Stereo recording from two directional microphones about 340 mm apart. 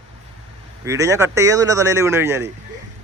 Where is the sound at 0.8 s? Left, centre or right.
Centre.